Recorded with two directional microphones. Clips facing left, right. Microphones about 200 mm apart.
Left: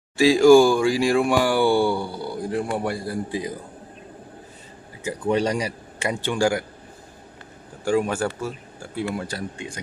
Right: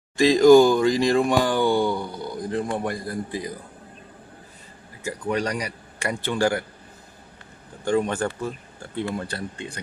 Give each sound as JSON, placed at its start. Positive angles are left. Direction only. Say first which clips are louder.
{"t": 0.2, "sound": "speech", "louder": "even", "side_deg": 10}
{"t": 5.0, "sound": "a man's voice", "louder": "left 4 dB", "side_deg": 25}
{"t": 7.9, "sound": "speech", "louder": "left 1 dB", "side_deg": 10}